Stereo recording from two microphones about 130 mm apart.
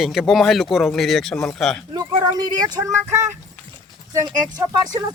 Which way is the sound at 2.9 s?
20° right (ahead or behind).